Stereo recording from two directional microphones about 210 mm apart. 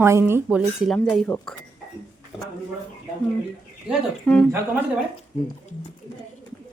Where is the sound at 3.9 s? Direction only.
5° left (ahead or behind).